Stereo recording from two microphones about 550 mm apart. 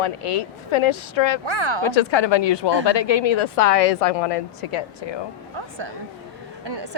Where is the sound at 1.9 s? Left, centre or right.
Left.